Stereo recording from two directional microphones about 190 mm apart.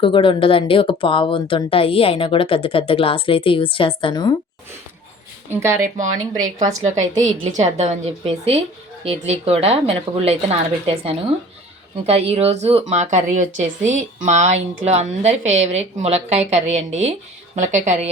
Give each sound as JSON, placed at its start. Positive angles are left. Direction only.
{"t": 0.0, "sound": "speech", "side_deg": 25}
{"t": 5.5, "sound": "speech", "side_deg": -15}
{"t": 5.8, "sound": "speech", "side_deg": -40}